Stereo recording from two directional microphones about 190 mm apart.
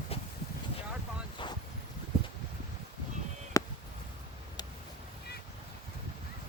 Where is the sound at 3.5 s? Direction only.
15° left (ahead or behind).